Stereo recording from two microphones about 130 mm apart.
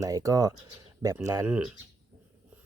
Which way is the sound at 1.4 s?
10° right (ahead or behind).